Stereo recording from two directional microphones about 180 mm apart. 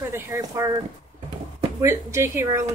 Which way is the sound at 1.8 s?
15° right (ahead or behind).